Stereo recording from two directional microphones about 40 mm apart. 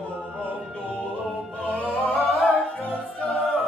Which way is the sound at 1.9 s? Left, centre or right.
Centre.